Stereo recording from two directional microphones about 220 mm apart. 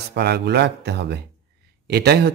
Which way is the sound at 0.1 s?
50° right (ahead or behind).